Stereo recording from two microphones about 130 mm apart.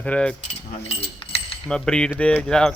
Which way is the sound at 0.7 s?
50° left (ahead or behind).